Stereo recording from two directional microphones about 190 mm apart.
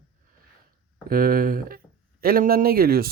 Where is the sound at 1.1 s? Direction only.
50° right (ahead or behind).